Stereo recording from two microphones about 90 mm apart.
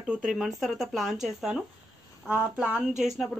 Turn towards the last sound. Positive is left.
turn(degrees=-5)  # may be behind; listen again after turning